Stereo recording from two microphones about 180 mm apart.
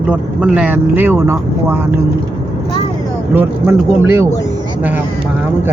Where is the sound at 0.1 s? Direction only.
5° right (ahead or behind).